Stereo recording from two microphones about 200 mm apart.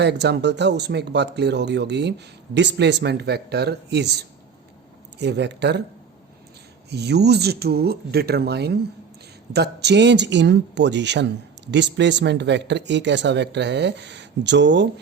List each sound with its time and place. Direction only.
0.0 s speech: 60° right (ahead or behind)
6.9 s speech: 55° right (ahead or behind)